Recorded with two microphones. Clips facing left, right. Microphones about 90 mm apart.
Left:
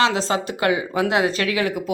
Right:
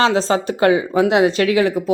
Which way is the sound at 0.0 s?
35° right (ahead or behind).